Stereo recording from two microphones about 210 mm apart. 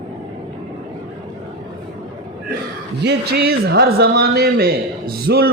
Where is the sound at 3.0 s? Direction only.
50° right (ahead or behind).